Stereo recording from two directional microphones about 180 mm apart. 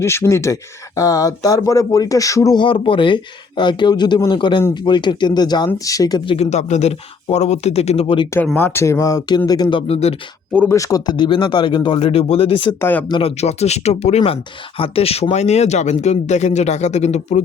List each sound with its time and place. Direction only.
0.0 s speech: 15° left (ahead or behind); by 8.3 s 30° left (ahead or behind)
8.5 s speech: 15° left (ahead or behind); by 10.2 s 35° left (ahead or behind)
10.5 s speech: 5° left (ahead or behind)
10.8 s speech: 20° left (ahead or behind)
12.8 s speech: 10° left (ahead or behind)
13.1 s speech: 30° left (ahead or behind)